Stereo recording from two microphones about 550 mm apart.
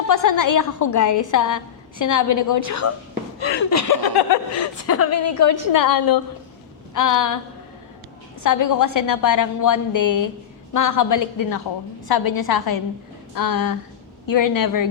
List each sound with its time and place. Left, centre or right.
0.1 s a woman's voice: left
4.9 s a woman's voice: left
8.4 s a woman's voice: left